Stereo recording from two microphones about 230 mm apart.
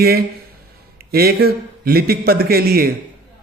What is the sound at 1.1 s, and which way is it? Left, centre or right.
A man's voice, right.